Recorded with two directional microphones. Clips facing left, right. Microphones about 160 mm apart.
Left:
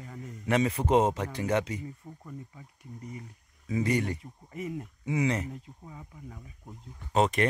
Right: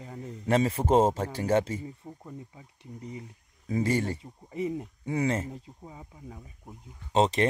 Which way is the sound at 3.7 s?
35° right (ahead or behind).